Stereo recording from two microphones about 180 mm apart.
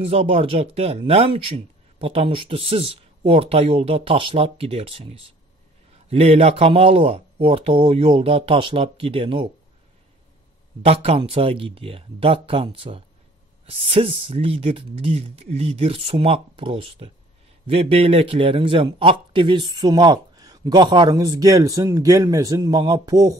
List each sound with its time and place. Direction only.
0.0 s speech: 35° right (ahead or behind)
10.8 s a man's voice: 35° right (ahead or behind)